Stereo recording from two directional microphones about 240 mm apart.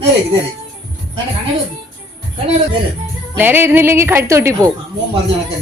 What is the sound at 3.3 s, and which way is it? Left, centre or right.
A woman's voice, centre.